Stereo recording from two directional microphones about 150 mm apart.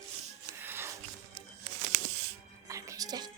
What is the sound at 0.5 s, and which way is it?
Music, 15° right (ahead or behind).